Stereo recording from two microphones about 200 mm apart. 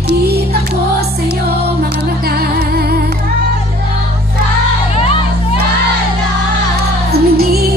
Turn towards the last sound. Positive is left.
turn(degrees=-50)  # may be behind; listen again after turning